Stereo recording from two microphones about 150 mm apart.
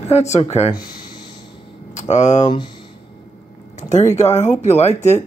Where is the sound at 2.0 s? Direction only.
50° left (ahead or behind).